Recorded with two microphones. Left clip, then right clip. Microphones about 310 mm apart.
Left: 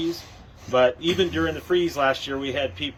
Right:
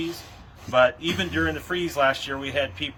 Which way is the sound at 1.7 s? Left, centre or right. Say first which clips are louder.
Left 2 dB; centre.